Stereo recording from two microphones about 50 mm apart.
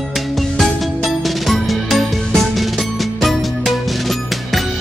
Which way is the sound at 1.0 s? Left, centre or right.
Centre.